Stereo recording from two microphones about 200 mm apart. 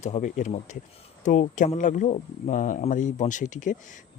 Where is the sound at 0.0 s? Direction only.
35° left (ahead or behind).